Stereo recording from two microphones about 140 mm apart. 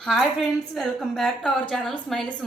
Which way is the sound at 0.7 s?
Centre (ahead or behind).